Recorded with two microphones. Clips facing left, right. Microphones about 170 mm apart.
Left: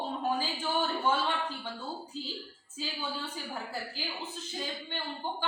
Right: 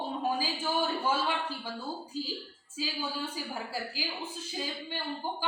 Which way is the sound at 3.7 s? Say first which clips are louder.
Right 2 dB; 10° right (ahead or behind).